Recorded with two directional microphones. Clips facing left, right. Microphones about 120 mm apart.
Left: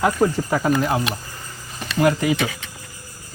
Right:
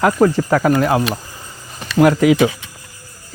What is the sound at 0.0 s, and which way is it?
Speech, 90° right.